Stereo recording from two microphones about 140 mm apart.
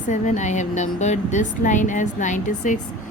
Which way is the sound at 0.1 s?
60° left (ahead or behind).